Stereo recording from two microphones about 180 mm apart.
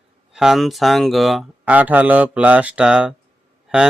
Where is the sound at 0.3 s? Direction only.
Centre (ahead or behind).